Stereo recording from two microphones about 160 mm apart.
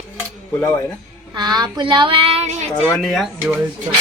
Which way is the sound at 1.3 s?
25° right (ahead or behind).